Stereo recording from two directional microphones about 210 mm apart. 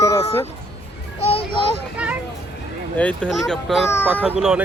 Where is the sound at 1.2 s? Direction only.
30° left (ahead or behind).